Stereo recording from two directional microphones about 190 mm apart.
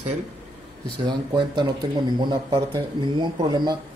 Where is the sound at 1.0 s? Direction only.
25° right (ahead or behind).